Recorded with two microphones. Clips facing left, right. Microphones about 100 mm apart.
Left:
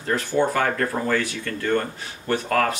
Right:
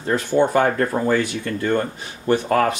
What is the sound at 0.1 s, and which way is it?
Speech, 20° right (ahead or behind).